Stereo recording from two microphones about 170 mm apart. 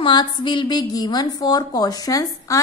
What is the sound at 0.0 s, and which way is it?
A woman's voice, 25° left (ahead or behind).